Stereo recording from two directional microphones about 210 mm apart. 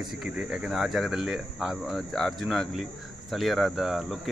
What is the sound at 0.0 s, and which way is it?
Speech, centre (ahead or behind).